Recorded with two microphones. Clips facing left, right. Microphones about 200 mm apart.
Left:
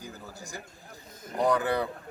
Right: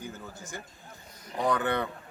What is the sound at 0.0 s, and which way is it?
A man's voice, 35° left (ahead or behind).